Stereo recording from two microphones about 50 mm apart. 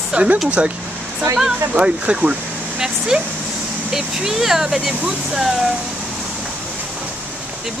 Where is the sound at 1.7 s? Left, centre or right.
Right.